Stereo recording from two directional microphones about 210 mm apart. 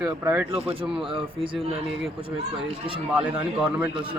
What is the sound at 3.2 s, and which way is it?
Speech, 5° right (ahead or behind).